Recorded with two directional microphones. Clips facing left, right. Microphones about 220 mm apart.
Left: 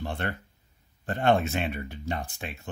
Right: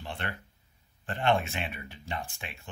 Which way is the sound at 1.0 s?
40° left (ahead or behind).